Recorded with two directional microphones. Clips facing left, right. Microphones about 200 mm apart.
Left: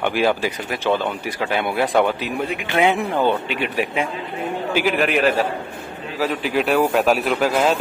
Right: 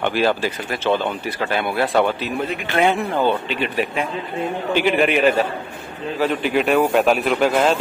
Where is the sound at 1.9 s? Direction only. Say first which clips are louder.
Even; 15° left (ahead or behind).